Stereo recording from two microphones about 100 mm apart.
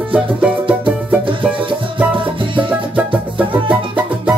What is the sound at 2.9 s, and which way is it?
Music, 15° right (ahead or behind).